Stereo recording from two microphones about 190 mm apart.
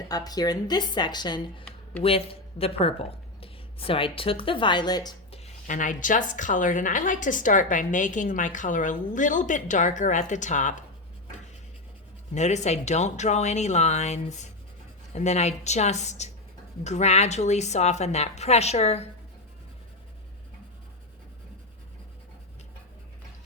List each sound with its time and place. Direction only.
0.1 s speech: 20° left (ahead or behind)
5.4 s speech: 40° left (ahead or behind)
12.3 s a woman's voice: 35° left (ahead or behind)